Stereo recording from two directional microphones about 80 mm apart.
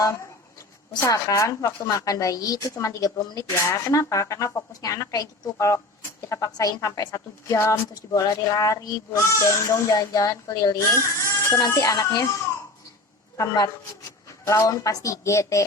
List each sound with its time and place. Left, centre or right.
1.0 s a woman's voice: left
10.8 s speech: left
11.7 s a woman's voice: left
13.3 s a woman's voice: left